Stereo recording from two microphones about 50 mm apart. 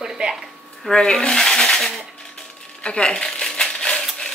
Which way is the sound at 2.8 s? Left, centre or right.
Centre.